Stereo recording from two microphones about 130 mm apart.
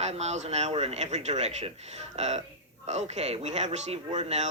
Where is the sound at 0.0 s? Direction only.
55° right (ahead or behind).